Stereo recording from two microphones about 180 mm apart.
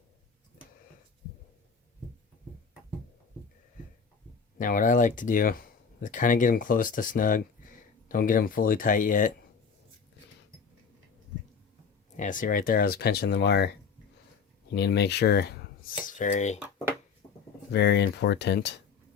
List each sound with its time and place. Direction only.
4.5 s speech: 50° left (ahead or behind)
12.1 s speech: 45° left (ahead or behind)
17.7 s speech: 70° left (ahead or behind)